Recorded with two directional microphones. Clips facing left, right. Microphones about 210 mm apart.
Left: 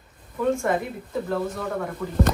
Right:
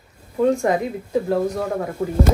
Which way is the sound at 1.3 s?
45° right (ahead or behind).